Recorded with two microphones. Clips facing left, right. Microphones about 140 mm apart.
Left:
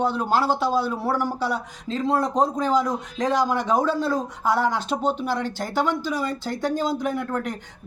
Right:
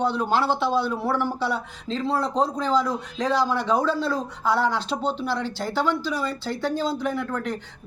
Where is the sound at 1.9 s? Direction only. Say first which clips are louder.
Left 2 dB; 45° left (ahead or behind).